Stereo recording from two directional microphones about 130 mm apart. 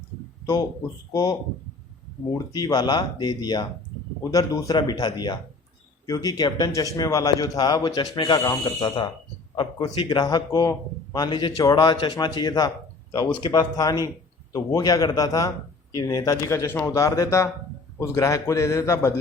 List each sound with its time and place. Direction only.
1.1 s a man's voice: 30° left (ahead or behind)